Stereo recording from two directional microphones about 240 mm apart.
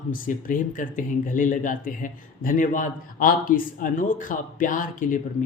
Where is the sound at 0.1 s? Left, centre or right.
Left.